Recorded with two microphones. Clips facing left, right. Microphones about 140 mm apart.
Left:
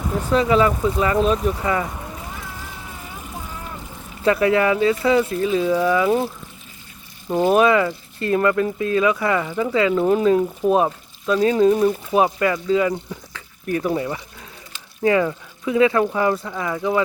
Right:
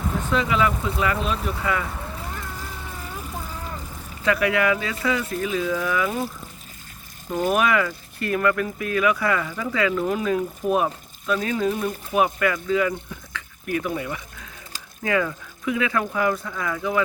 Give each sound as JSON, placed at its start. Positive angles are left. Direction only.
{"t": 0.2, "sound": "speech", "side_deg": 35}
{"t": 2.3, "sound": "cat", "side_deg": 5}
{"t": 4.2, "sound": "speech", "side_deg": 30}
{"t": 7.3, "sound": "speech", "side_deg": 25}
{"t": 13.3, "sound": "liquid", "side_deg": 35}
{"t": 15.0, "sound": "speech", "side_deg": 30}